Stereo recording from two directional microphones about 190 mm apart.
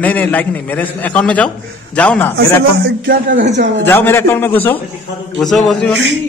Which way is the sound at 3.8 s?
10° left (ahead or behind).